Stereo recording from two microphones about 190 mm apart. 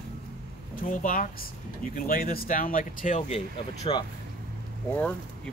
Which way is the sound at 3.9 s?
25° left (ahead or behind).